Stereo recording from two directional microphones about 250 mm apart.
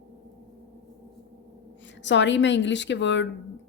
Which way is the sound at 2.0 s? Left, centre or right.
Left.